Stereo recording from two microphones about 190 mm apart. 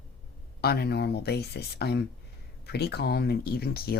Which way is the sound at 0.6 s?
55° left (ahead or behind).